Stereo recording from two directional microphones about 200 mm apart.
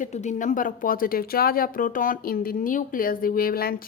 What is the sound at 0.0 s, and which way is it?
Speech, 35° left (ahead or behind).